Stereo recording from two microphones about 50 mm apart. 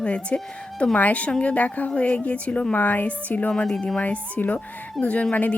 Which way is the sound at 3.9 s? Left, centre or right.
Left.